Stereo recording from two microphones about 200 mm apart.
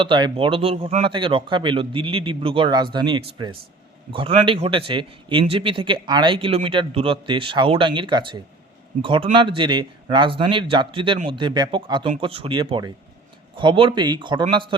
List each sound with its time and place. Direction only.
0.0 s a man's voice: 25° right (ahead or behind)